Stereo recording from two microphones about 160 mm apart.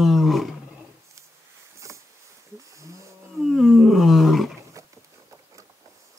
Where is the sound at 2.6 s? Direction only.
20° right (ahead or behind).